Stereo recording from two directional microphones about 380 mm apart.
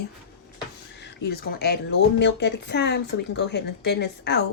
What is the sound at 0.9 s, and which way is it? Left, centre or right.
Speech, left.